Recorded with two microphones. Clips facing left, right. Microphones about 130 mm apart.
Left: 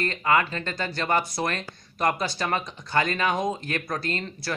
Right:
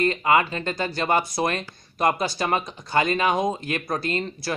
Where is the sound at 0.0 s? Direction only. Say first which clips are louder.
Right 3 dB; 15° right (ahead or behind).